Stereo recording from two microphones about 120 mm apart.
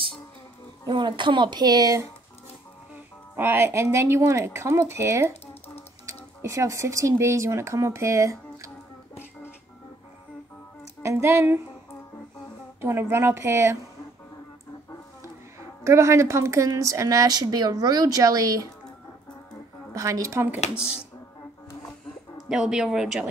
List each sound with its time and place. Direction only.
0.8 s speech: 40° right (ahead or behind)
3.3 s a woman's voice: 20° right (ahead or behind)
5.3 s typing: 60° left (ahead or behind)
6.4 s a woman's voice: 25° right (ahead or behind)
11.0 s a woman's voice: 25° right (ahead or behind)
12.8 s a woman's voice: 20° right (ahead or behind)
15.8 s a woman's voice: 25° right (ahead or behind)
19.9 s a woman's voice: 25° right (ahead or behind)
22.5 s speech: 5° right (ahead or behind)